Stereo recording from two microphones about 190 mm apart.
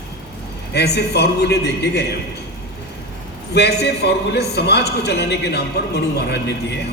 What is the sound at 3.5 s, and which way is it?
A man's voice, 60° left (ahead or behind).